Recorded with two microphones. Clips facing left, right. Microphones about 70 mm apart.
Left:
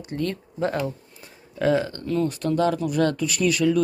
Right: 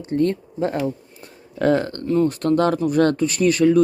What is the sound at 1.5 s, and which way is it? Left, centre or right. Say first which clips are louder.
Speech: right 3 dB; right.